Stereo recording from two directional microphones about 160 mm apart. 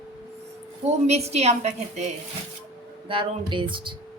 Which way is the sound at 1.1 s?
40° right (ahead or behind).